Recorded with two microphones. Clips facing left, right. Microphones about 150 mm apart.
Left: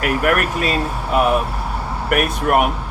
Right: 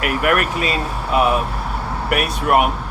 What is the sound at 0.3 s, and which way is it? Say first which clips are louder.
Speech: even; 45° left (ahead or behind).